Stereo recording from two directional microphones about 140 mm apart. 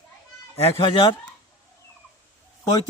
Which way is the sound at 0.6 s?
40° left (ahead or behind).